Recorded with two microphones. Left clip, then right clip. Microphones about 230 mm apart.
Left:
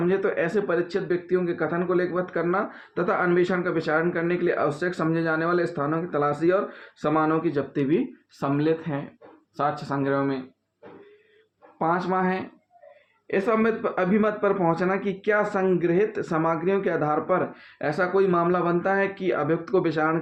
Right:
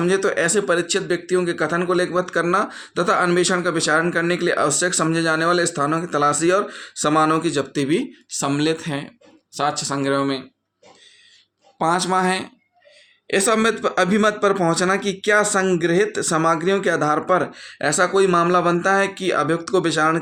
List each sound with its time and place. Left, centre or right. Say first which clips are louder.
0.0 s speech: right 5 dB; right
11.8 s speech: right 5 dB; right
19.6 s speech: right 5 dB; right